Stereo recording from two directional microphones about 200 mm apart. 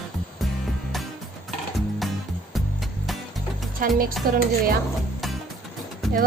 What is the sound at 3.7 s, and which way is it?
Speech, 45° right (ahead or behind).